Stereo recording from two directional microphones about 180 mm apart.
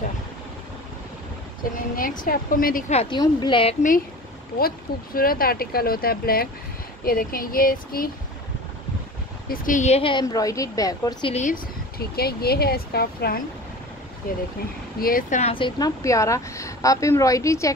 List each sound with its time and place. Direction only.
1.6 s speech: 50° left (ahead or behind)
2.9 s a woman's voice: 35° left (ahead or behind)
4.6 s speech: 55° left (ahead or behind)
9.5 s speech: 45° left (ahead or behind)
10.2 s a woman's voice: 20° left (ahead or behind)
11.3 s speech: 45° left (ahead or behind)
15.0 s speech: 50° left (ahead or behind)
15.5 s a woman's voice: 25° left (ahead or behind)